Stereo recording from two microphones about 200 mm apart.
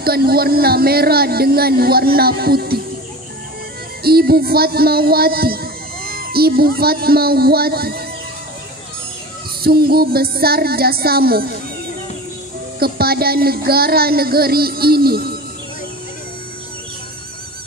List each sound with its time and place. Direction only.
0.0 s speech: 50° right (ahead or behind)
4.0 s a man's voice: 50° right (ahead or behind)
9.6 s speech: 50° right (ahead or behind)
12.7 s speech: 50° right (ahead or behind)